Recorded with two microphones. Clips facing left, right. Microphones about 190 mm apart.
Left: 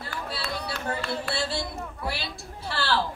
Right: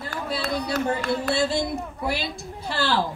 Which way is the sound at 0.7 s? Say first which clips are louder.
Right 7 dB; 40° right (ahead or behind).